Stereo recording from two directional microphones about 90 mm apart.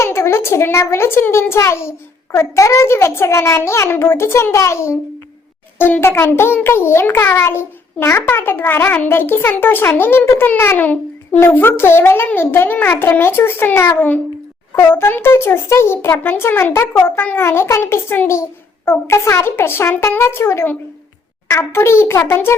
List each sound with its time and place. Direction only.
0.0 s a child's voice: 30° left (ahead or behind)